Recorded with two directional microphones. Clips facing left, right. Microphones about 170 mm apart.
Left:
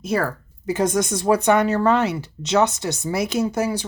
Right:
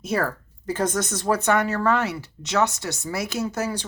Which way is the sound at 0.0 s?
Centre (ahead or behind).